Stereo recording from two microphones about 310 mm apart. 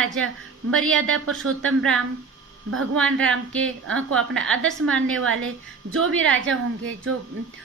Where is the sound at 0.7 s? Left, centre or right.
Right.